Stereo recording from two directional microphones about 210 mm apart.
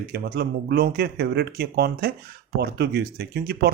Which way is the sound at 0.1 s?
50° right (ahead or behind).